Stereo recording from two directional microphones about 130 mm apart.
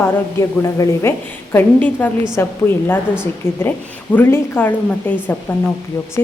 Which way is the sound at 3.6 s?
15° left (ahead or behind).